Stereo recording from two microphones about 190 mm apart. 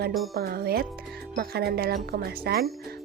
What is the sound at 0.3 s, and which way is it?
Speech, 55° right (ahead or behind).